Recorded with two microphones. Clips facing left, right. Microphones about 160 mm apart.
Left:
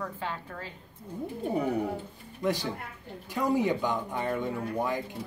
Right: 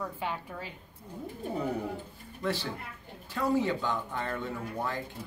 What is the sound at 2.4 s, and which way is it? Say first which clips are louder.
Speech: left 3 dB; 15° left (ahead or behind).